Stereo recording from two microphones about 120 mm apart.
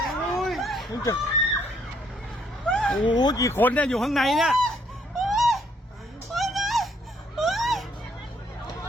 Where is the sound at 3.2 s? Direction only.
30° left (ahead or behind).